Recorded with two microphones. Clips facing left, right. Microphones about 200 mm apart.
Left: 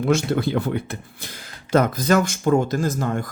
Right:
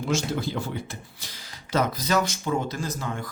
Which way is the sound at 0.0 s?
60° left (ahead or behind).